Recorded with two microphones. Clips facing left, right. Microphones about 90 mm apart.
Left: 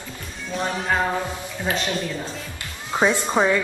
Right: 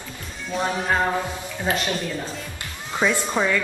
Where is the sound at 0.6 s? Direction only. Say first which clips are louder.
Right 1 dB; 5° right (ahead or behind).